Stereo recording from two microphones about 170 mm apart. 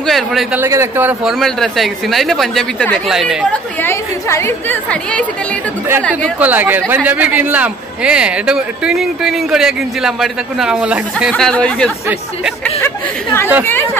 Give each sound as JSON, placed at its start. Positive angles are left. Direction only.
{"t": 0.0, "sound": "a man's voice", "side_deg": 0}
{"t": 0.6, "sound": "a man's voice", "side_deg": -15}
{"t": 1.4, "sound": "a man's voice", "side_deg": 0}
{"t": 3.8, "sound": "a woman's voice", "side_deg": 15}
{"t": 6.4, "sound": "a man's voice", "side_deg": -10}